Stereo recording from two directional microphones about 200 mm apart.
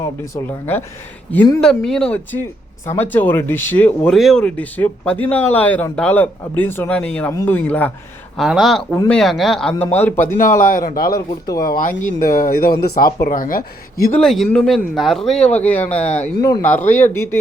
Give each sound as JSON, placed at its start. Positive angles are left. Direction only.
{"t": 0.0, "sound": "speech", "side_deg": 10}
{"t": 10.6, "sound": "speech", "side_deg": 45}
{"t": 14.2, "sound": "speech", "side_deg": 0}